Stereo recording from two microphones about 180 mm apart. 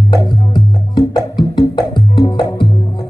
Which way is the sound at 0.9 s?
25° left (ahead or behind).